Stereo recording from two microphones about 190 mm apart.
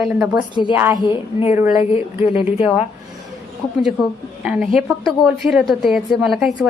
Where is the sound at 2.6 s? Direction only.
35° left (ahead or behind).